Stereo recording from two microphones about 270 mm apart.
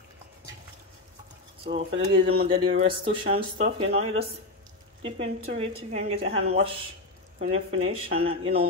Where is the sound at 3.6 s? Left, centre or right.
Right.